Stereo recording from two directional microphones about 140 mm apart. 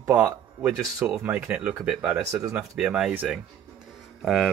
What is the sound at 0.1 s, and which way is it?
Speech, 10° right (ahead or behind).